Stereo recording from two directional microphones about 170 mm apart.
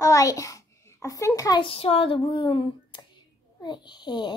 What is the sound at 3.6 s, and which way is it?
Speech, 25° left (ahead or behind).